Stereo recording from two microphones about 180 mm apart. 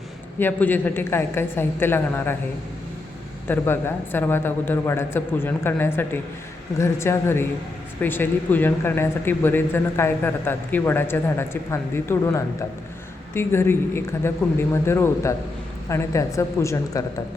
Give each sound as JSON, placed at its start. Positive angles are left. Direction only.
{"t": 0.3, "sound": "a man's voice", "side_deg": 10}
{"t": 3.5, "sound": "a man's voice", "side_deg": 10}